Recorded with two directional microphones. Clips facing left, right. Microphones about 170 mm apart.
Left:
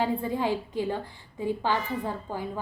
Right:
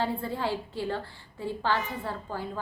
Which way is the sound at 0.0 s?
15° left (ahead or behind).